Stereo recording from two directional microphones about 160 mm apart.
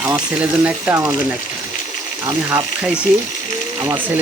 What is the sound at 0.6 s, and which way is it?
Speech, 15° right (ahead or behind).